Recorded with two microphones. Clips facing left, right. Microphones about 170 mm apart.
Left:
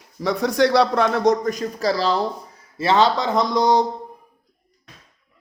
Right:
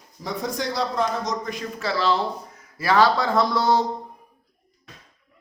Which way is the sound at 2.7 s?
25° left (ahead or behind).